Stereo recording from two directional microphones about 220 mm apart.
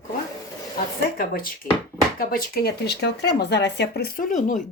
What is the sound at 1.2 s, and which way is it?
Speech, 40° left (ahead or behind).